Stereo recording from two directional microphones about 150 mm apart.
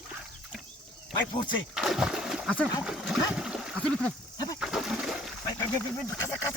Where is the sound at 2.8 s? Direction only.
Centre (ahead or behind).